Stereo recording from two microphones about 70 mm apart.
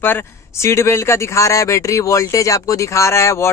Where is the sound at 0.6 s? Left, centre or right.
Left.